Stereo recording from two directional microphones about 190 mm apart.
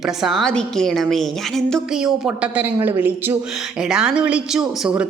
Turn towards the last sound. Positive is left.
turn(degrees=-5)  # may be behind; listen again after turning